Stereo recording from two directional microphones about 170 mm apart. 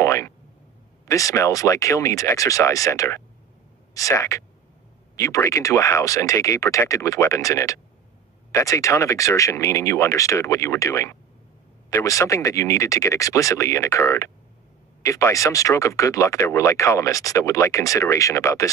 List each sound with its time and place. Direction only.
0.0 s boing: 15° left (ahead or behind)
1.0 s speech: 20° left (ahead or behind)